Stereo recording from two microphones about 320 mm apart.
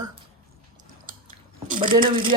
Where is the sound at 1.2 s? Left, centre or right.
Right.